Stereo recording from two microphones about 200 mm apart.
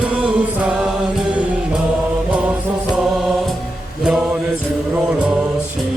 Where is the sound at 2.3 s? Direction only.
5° right (ahead or behind).